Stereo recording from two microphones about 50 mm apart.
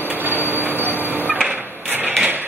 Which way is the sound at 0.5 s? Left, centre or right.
Right.